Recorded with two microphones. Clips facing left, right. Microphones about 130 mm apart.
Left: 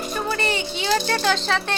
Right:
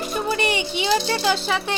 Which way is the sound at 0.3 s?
15° right (ahead or behind).